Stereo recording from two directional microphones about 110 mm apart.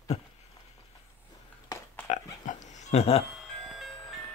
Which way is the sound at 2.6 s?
90° left.